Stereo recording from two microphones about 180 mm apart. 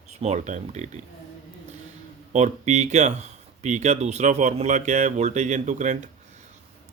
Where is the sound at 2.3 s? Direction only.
40° right (ahead or behind).